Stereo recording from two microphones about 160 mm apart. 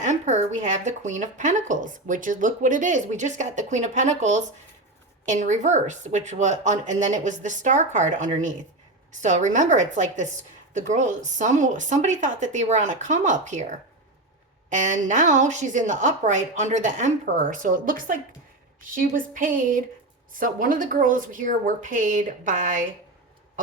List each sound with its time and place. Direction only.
0.0 s a woman's voice: 45° right (ahead or behind)